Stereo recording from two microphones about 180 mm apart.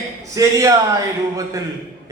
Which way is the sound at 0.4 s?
20° right (ahead or behind).